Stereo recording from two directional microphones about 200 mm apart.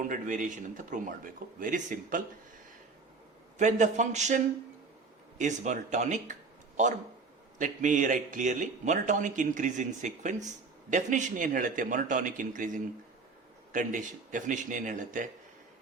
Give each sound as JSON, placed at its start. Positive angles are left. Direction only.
{"t": 0.1, "sound": "a man's voice", "side_deg": -40}
{"t": 3.6, "sound": "a man's voice", "side_deg": -35}
{"t": 7.6, "sound": "a man's voice", "side_deg": -40}